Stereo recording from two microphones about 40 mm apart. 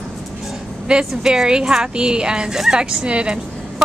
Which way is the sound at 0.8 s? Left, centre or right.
Right.